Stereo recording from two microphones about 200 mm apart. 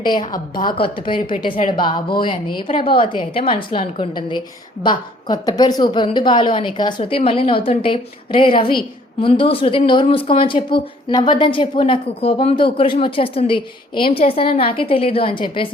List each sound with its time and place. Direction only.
0.0 s a woman's voice: 20° left (ahead or behind)